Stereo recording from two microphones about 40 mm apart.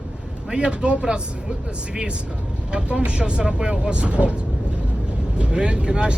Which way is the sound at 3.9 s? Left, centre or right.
Right.